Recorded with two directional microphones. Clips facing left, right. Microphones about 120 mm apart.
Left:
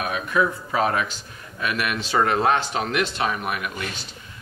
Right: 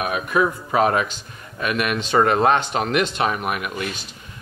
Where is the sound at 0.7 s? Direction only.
20° right (ahead or behind).